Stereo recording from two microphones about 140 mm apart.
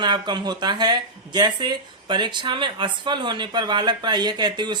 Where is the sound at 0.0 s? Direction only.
30° right (ahead or behind).